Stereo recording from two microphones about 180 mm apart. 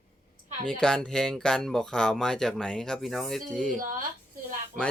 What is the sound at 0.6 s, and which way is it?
Speech, 5° left (ahead or behind).